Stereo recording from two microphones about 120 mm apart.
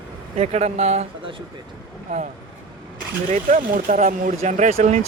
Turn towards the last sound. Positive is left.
turn(degrees=-65)  # may be behind; listen again after turning